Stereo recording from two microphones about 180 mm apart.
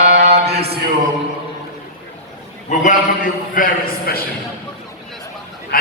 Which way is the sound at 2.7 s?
45° left (ahead or behind).